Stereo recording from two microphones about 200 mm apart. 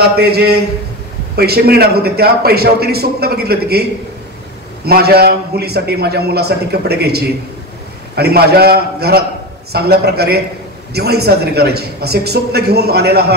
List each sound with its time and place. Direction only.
0.0 s a man's voice: 50° right (ahead or behind)
4.8 s a man's voice: 50° right (ahead or behind)